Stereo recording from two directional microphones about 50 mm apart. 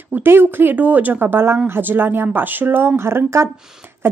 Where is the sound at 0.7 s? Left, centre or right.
Right.